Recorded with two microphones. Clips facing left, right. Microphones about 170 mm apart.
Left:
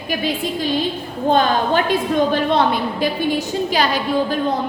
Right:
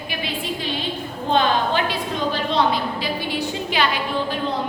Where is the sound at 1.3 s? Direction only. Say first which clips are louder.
Left 3 dB; 45° left (ahead or behind).